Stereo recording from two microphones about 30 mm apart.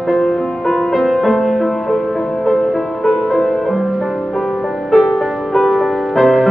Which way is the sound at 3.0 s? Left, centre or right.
Centre.